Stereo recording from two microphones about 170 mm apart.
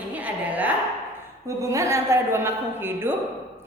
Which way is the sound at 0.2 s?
10° right (ahead or behind).